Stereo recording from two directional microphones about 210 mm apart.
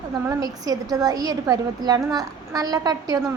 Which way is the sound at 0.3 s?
15° right (ahead or behind).